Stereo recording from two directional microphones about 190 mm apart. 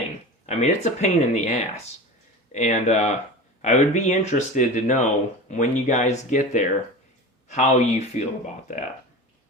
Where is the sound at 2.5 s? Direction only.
35° left (ahead or behind).